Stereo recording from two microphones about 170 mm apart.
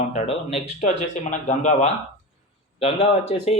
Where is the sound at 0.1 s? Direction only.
40° left (ahead or behind).